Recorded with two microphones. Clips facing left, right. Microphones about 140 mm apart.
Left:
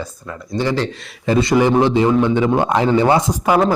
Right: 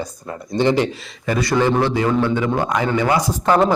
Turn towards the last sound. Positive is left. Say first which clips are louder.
# left 2 dB
turn(degrees=15)  # may be behind; listen again after turning